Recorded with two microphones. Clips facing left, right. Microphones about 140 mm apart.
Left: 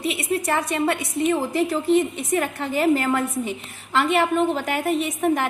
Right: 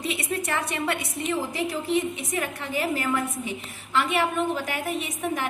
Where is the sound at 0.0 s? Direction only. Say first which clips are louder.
Left 5 dB; 30° left (ahead or behind).